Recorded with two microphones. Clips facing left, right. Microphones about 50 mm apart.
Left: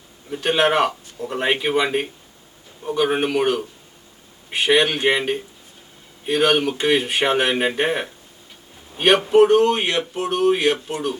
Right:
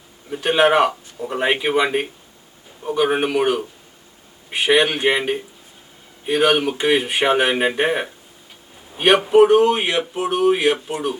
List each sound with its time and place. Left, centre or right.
0.3 s speech: centre